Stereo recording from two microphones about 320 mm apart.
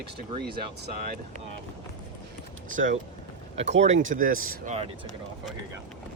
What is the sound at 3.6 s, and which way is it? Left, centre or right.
Speech, right.